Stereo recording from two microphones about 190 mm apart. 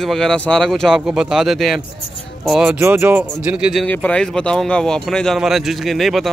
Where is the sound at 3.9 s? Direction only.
10° left (ahead or behind).